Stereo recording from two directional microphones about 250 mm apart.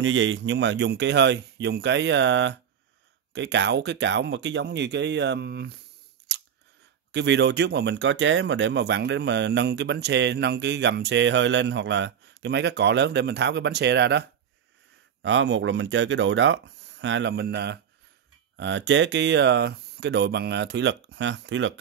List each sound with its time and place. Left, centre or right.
0.0 s speech: right
7.1 s speech: right
15.2 s speech: right